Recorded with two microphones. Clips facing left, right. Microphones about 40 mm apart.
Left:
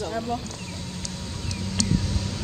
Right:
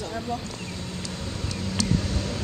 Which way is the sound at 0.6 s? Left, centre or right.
Centre.